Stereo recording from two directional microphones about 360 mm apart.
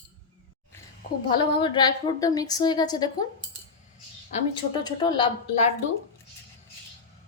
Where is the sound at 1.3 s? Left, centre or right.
Centre.